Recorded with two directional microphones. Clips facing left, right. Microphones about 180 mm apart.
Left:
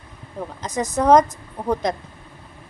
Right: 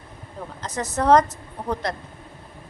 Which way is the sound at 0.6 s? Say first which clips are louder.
Left 3 dB; 15° left (ahead or behind).